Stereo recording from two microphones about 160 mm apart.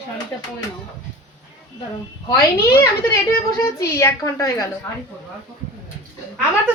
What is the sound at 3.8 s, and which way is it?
Speech, 20° left (ahead or behind).